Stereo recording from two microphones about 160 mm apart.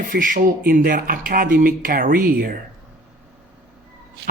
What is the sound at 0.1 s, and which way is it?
Speech, 60° right (ahead or behind).